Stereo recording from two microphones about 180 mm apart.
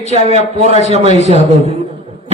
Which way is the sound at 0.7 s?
35° left (ahead or behind).